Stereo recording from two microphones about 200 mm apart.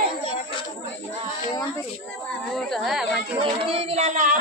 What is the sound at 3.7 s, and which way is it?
Child singing, 30° right (ahead or behind).